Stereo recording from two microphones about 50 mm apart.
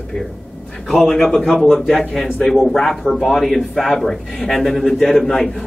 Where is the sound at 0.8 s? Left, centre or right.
Centre.